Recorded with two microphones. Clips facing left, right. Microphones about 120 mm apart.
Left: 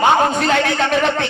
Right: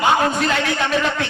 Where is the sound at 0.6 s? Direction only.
45° left (ahead or behind).